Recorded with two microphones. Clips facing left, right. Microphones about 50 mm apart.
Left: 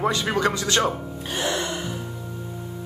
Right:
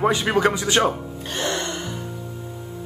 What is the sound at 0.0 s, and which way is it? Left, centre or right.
Speech, centre.